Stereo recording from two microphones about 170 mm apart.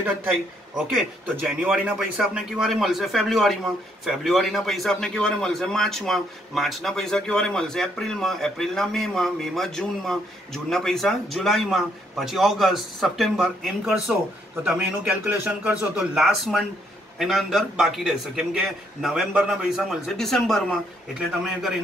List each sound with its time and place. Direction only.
0.9 s a man's voice: 5° right (ahead or behind)